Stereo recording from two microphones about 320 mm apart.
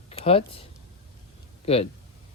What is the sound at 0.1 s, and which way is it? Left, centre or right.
Speech, centre.